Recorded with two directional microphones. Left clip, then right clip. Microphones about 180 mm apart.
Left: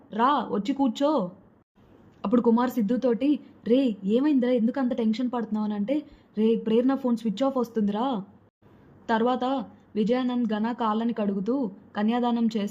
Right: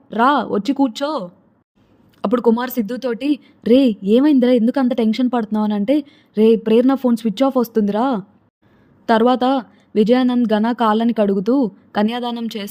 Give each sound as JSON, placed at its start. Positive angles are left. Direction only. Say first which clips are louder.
{"t": 0.1, "sound": "a woman's voice", "louder": "right 8 dB", "side_deg": -35}